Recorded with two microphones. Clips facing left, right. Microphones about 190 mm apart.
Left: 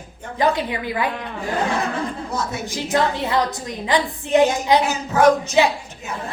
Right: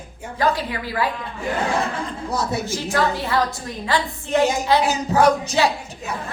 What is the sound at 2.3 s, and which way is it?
Speech, 35° right (ahead or behind).